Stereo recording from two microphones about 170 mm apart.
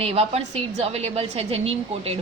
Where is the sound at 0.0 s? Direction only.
35° right (ahead or behind).